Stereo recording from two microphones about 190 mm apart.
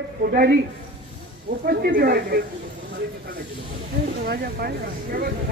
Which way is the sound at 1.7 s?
55° right (ahead or behind).